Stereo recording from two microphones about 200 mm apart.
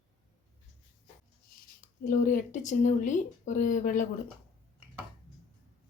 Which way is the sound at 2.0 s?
40° left (ahead or behind).